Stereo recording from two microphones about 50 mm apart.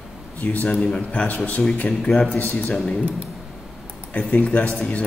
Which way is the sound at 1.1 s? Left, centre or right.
Left.